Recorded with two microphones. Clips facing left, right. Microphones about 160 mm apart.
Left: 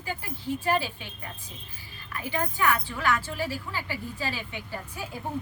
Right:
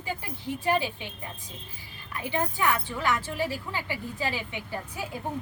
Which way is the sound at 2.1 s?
25° right (ahead or behind).